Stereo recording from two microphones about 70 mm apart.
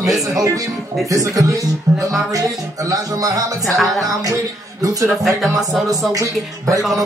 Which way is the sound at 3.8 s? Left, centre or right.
Centre.